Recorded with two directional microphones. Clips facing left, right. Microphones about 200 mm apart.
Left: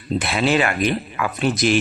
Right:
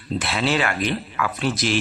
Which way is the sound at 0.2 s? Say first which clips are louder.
Left 3 dB; 15° left (ahead or behind).